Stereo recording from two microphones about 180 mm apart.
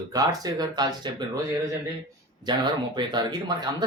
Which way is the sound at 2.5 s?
25° right (ahead or behind).